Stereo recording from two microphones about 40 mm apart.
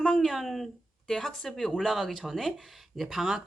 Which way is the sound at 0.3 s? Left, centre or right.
Centre.